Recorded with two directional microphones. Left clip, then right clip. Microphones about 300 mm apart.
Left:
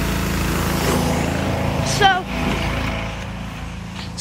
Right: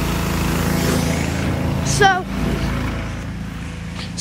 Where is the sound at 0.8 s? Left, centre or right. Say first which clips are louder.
Left 1 dB; left.